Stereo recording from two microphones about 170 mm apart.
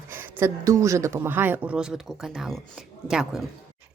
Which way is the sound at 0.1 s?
15° right (ahead or behind).